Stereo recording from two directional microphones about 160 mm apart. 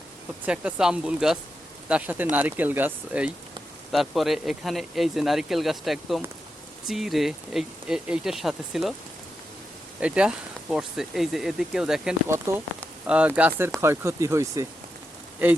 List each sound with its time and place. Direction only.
0.4 s speech: 5° right (ahead or behind)
10.0 s speech: 5° right (ahead or behind)
12.3 s speech: 15° right (ahead or behind)